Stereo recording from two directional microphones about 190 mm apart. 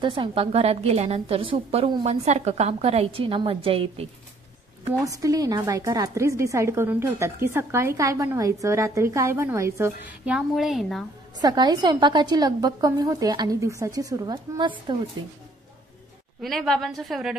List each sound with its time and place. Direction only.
0.0 s a woman's voice: 25° right (ahead or behind)
4.8 s speech: 20° right (ahead or behind); by 11.1 s centre (ahead or behind)
11.3 s a woman's voice: 20° right (ahead or behind)
16.3 s a woman's voice: centre (ahead or behind)